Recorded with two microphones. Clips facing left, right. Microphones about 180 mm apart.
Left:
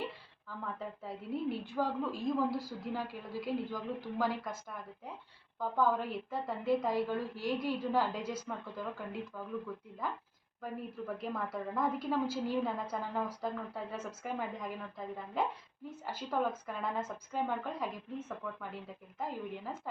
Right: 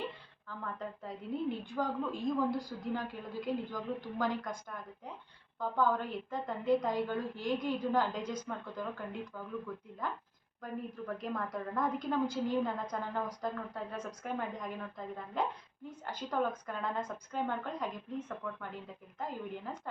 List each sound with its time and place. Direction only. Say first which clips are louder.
0.4 s a woman's voice: even; 5° left (ahead or behind)